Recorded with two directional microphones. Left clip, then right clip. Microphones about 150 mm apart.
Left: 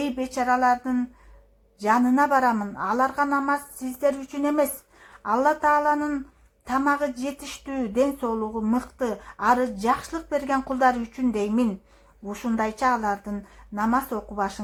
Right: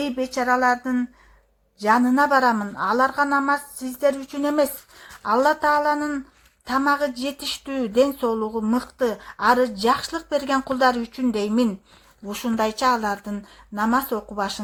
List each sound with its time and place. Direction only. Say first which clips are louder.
0.0 s a woman's voice: right 2 dB; 25° right (ahead or behind)
4.2 s speech: right 2 dB; 45° right (ahead or behind)
4.4 s a woman's voice: right 2 dB; 25° right (ahead or behind)
12.2 s a woman's voice: right 3 dB; 30° right (ahead or behind)